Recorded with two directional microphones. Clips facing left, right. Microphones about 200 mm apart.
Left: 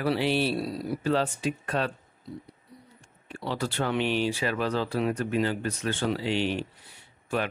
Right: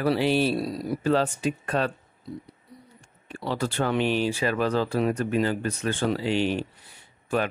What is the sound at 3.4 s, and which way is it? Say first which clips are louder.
Speech: right 3 dB; 45° right (ahead or behind).